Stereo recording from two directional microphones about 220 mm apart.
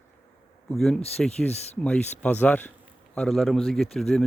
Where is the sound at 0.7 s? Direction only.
Centre (ahead or behind).